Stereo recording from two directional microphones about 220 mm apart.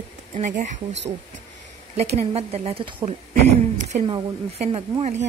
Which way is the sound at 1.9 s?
30° right (ahead or behind).